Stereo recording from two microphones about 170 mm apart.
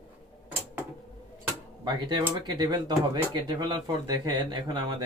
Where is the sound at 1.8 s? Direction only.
25° right (ahead or behind).